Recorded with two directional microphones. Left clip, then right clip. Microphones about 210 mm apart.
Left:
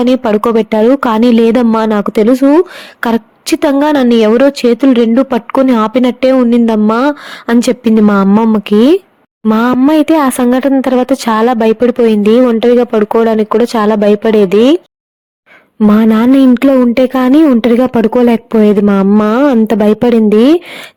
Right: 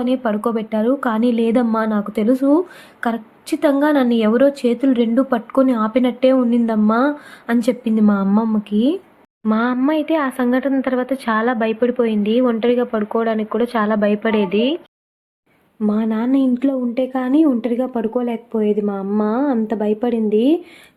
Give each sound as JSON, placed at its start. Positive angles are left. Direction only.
{"t": 0.0, "sound": "a woman's voice", "side_deg": 45}
{"t": 9.5, "sound": "speech", "side_deg": 60}
{"t": 15.8, "sound": "a woman's voice", "side_deg": 50}